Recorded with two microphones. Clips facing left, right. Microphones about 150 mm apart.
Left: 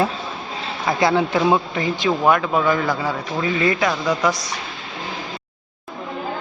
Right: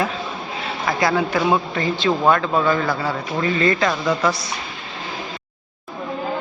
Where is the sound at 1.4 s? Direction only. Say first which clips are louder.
Left 1 dB; 10° left (ahead or behind).